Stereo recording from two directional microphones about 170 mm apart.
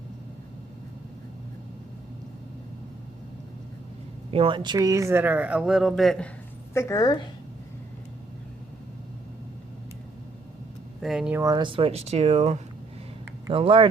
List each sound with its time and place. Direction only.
4.3 s speech: 35° right (ahead or behind); by 6.3 s 5° left (ahead or behind)
6.7 s a woman's voice: 20° left (ahead or behind)
11.0 s speech: 5° right (ahead or behind)
11.3 s speech: 20° right (ahead or behind)